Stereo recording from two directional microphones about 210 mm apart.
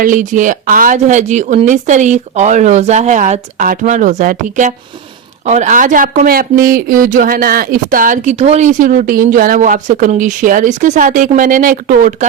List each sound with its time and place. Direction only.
0.0 s speech: 40° right (ahead or behind)